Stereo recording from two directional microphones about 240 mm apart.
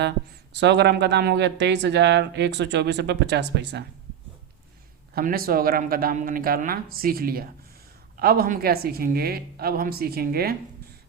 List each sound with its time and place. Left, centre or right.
0.6 s speech: right
5.1 s a woman's voice: right